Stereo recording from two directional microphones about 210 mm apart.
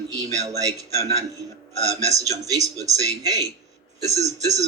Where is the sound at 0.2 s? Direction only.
15° right (ahead or behind).